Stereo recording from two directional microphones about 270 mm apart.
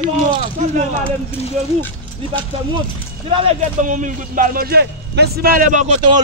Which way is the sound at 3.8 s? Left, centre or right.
Right.